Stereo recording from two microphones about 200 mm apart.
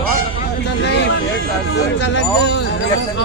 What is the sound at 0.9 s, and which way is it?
Speech, 60° left (ahead or behind).